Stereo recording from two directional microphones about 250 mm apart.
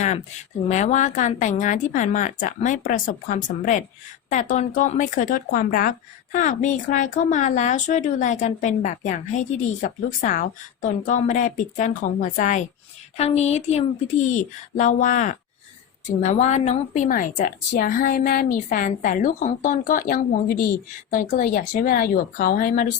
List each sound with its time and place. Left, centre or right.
0.7 s a woman's voice: left